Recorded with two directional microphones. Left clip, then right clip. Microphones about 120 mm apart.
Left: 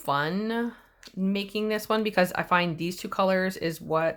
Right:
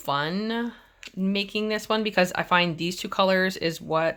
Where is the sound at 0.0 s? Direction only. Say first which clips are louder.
Even; 5° right (ahead or behind).